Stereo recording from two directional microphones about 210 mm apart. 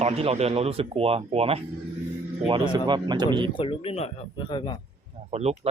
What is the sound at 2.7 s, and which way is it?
Speech, 20° right (ahead or behind).